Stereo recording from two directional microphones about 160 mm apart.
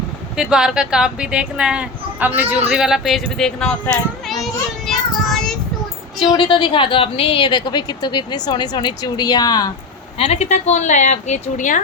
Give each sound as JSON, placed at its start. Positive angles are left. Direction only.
{"t": 0.3, "sound": "speech", "side_deg": -5}
{"t": 4.9, "sound": "child singing", "side_deg": 5}
{"t": 6.1, "sound": "a woman's voice", "side_deg": 30}
{"t": 10.2, "sound": "a woman's voice", "side_deg": 40}